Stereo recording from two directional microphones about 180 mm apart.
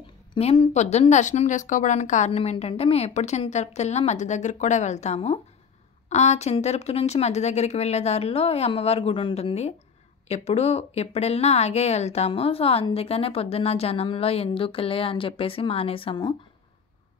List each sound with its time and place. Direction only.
0.3 s speech: 30° left (ahead or behind)